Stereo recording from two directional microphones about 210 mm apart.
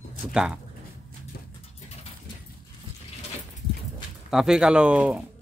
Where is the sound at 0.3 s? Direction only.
5° right (ahead or behind).